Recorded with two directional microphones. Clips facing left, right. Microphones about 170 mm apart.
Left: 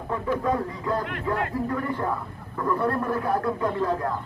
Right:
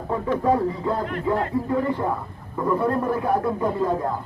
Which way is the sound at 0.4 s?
30° right (ahead or behind).